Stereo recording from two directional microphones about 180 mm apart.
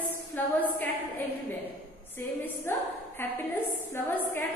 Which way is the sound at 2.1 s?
10° left (ahead or behind).